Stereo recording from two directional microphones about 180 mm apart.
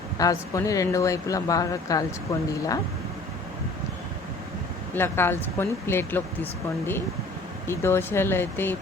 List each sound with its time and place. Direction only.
0.2 s speech: 20° left (ahead or behind)
4.9 s speech: 10° left (ahead or behind)
7.7 s speech: 15° left (ahead or behind)